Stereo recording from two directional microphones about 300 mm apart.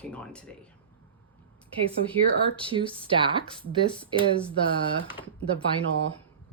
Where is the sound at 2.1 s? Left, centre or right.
Centre.